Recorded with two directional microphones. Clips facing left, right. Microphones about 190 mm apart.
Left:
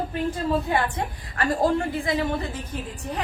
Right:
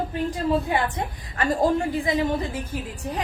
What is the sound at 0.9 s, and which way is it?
A woman's voice, 20° right (ahead or behind).